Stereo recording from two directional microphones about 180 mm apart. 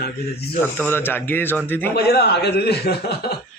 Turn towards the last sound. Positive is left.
turn(degrees=65)  # may be behind; listen again after turning